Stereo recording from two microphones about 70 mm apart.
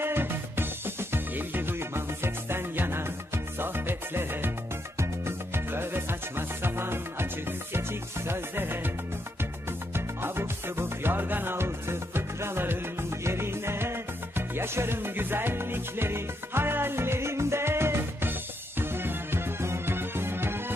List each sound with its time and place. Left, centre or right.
0.0 s music: right